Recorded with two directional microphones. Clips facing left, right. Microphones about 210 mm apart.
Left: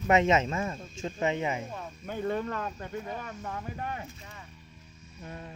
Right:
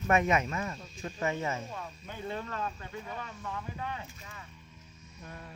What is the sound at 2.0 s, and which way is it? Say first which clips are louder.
Speech: left 8 dB; 50° left (ahead or behind).